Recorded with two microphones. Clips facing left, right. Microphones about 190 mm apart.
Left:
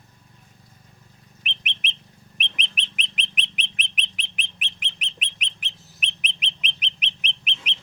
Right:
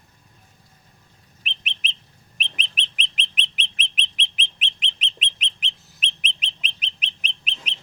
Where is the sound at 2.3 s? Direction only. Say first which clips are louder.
Even; 30° right (ahead or behind).